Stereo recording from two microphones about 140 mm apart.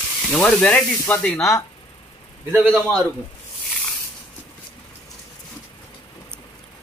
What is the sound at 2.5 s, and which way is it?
Speech, 10° right (ahead or behind).